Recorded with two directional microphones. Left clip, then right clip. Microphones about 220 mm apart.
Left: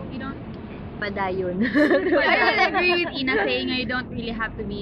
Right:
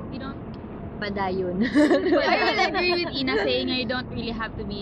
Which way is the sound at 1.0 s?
15° right (ahead or behind).